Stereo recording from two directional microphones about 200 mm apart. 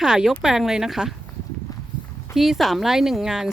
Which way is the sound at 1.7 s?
20° left (ahead or behind).